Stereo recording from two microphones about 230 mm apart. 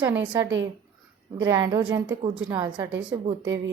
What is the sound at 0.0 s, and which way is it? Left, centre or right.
A woman's voice, centre.